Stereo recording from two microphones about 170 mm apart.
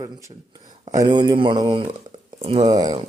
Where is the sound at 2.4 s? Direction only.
40° right (ahead or behind).